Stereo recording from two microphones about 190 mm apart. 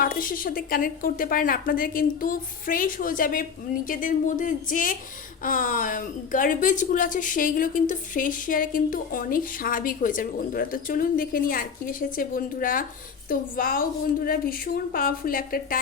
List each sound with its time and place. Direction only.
0.0 s a woman's voice: 50° left (ahead or behind)